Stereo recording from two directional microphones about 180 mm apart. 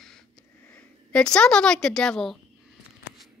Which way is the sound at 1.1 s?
5° left (ahead or behind).